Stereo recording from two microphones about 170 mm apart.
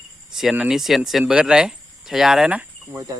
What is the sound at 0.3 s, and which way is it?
Speech, 5° right (ahead or behind).